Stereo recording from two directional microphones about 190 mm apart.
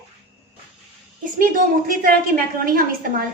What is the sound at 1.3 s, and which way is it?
A woman's voice, 45° right (ahead or behind).